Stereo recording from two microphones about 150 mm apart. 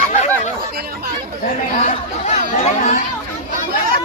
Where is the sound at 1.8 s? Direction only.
45° left (ahead or behind).